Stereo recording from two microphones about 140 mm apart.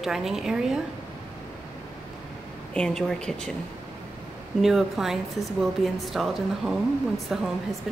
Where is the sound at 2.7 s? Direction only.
5° left (ahead or behind).